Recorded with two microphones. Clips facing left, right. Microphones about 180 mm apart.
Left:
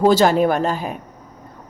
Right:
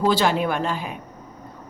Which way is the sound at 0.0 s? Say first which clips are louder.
Left 6 dB; 45° left (ahead or behind).